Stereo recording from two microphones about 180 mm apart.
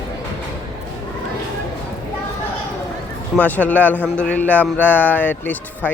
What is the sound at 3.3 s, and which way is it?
Speech, 10° left (ahead or behind).